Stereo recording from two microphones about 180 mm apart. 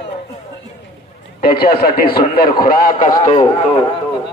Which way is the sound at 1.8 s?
55° left (ahead or behind).